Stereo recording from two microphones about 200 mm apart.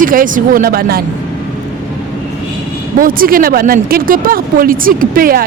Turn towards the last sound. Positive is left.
turn(degrees=-45)  # may be behind; listen again after turning